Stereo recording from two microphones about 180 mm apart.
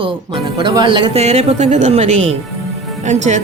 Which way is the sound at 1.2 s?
40° right (ahead or behind).